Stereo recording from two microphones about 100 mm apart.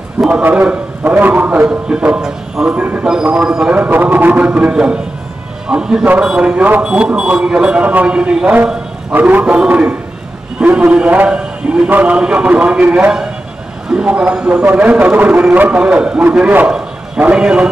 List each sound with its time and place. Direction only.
0.3 s a man's voice: 20° right (ahead or behind)
3.7 s a man's voice: 20° right (ahead or behind)
9.5 s a man's voice: 5° right (ahead or behind)
13.8 s a man's voice: 10° right (ahead or behind)